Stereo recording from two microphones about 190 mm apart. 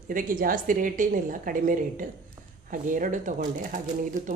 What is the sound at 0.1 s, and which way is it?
Speech, 45° right (ahead or behind).